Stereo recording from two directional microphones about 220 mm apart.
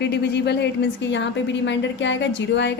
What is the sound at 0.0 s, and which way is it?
A woman's voice, 50° left (ahead or behind).